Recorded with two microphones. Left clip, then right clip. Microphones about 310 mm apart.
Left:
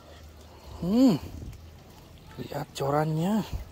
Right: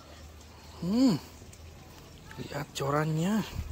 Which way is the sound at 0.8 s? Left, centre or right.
Centre.